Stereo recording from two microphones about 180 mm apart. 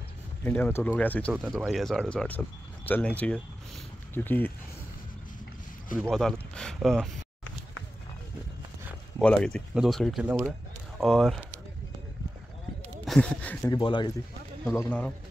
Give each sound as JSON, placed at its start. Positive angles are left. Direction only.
{"t": 0.4, "sound": "speech", "side_deg": 10}
{"t": 1.3, "sound": "speech", "side_deg": 0}
{"t": 5.9, "sound": "speech", "side_deg": 0}
{"t": 9.2, "sound": "speech", "side_deg": 5}
{"t": 13.0, "sound": "speech", "side_deg": 5}
{"t": 13.7, "sound": "speech", "side_deg": 25}
{"t": 14.6, "sound": "speech", "side_deg": 10}